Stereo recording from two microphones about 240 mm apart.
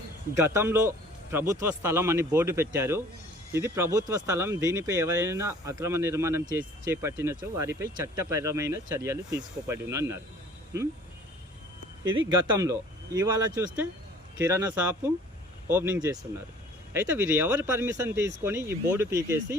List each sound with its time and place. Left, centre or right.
0.3 s speech: centre
12.3 s speech: centre